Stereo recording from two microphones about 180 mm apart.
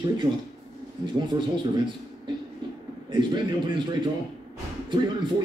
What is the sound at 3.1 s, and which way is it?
Speech, 25° right (ahead or behind).